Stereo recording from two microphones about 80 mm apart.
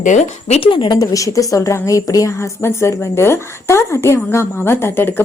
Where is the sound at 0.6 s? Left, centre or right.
Left.